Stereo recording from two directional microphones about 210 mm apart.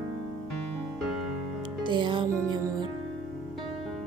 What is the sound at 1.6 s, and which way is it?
Music, 20° right (ahead or behind).